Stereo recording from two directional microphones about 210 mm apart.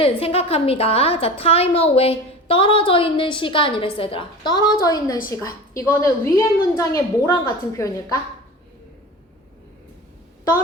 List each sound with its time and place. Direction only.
0.0 s a woman's voice: 30° left (ahead or behind)